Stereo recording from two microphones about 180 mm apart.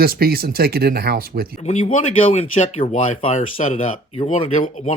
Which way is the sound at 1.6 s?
40° left (ahead or behind).